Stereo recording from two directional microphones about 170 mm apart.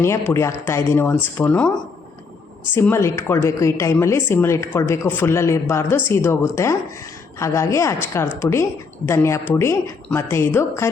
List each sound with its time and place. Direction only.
0.0 s a woman's voice: 15° left (ahead or behind)
2.7 s a woman's voice: 15° left (ahead or behind)